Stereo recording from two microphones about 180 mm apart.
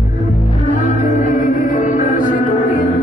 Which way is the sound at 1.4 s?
45° left (ahead or behind).